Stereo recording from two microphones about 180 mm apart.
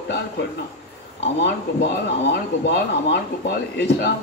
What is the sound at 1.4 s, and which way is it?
Speech, 75° left (ahead or behind).